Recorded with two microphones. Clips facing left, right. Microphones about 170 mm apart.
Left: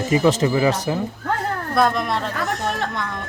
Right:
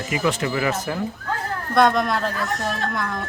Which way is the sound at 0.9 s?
20° left (ahead or behind).